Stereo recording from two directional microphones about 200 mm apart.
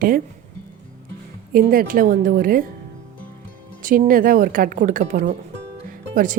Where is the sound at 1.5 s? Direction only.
45° right (ahead or behind).